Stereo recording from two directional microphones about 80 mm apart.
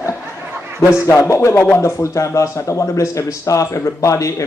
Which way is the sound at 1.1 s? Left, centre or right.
Left.